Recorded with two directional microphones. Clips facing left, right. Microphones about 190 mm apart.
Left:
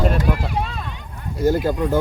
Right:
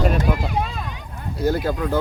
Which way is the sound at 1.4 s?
15° left (ahead or behind).